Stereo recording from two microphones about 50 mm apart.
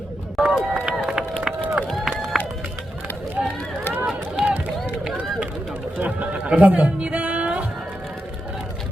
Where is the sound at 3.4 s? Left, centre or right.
Right.